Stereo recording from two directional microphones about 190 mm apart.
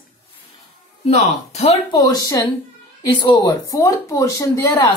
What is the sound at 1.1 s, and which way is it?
Speech, 35° left (ahead or behind).